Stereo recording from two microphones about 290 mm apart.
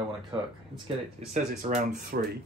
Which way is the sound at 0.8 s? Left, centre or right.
Right.